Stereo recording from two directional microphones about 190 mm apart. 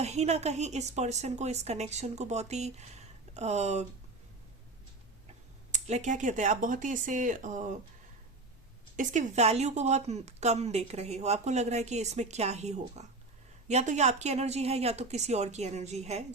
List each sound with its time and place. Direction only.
0.0 s a woman's voice: 35° right (ahead or behind)
5.7 s a woman's voice: 40° right (ahead or behind)
9.0 s a woman's voice: 40° right (ahead or behind)